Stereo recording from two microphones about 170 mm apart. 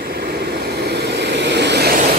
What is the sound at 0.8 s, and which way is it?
Vehicle, 85° right.